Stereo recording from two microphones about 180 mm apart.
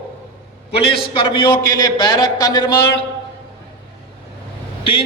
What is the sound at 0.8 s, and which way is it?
A man's voice, 30° left (ahead or behind).